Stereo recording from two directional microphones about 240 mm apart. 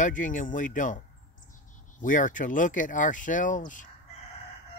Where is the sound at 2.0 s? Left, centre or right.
Left.